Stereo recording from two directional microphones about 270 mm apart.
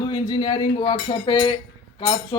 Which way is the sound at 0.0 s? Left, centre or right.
Centre.